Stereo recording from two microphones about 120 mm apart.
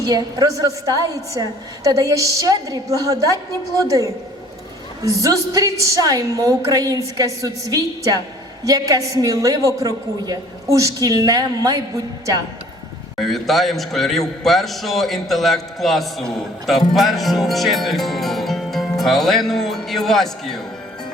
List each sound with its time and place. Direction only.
0.0 s a woman's voice: 30° right (ahead or behind)
5.0 s a woman's voice: 30° right (ahead or behind)
13.1 s a man's voice: centre (ahead or behind)